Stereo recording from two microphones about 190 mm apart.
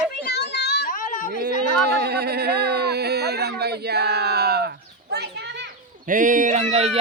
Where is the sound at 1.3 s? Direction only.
55° right (ahead or behind).